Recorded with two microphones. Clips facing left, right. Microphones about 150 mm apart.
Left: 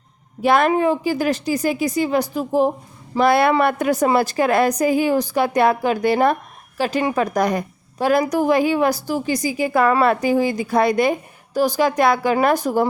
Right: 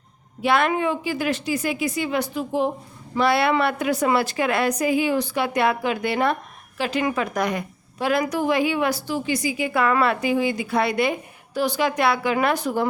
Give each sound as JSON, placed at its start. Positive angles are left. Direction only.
{"t": 0.4, "sound": "a woman's voice", "side_deg": 40}